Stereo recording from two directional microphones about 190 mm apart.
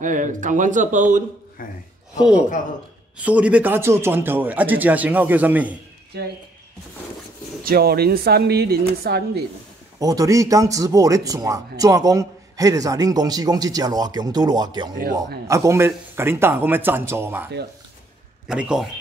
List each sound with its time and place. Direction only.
0.0 s speech: 40° right (ahead or behind)
1.6 s speech: 45° left (ahead or behind)
3.2 s speech: 5° right (ahead or behind)
6.1 s speech: 60° right (ahead or behind)
7.6 s speech: 55° right (ahead or behind)
9.9 s a man's voice: 20° right (ahead or behind)
18.5 s speech: 5° right (ahead or behind)